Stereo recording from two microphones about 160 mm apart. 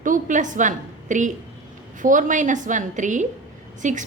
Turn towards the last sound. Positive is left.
turn(degrees=-50)  # may be behind; listen again after turning